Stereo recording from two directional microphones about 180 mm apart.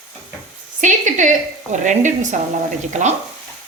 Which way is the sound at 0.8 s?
45° right (ahead or behind).